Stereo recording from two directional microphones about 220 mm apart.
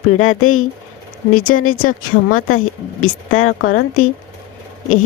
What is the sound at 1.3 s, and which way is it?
Speech, 40° left (ahead or behind).